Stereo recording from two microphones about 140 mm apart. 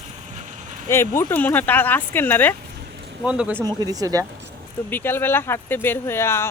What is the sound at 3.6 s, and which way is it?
Speech, 25° right (ahead or behind).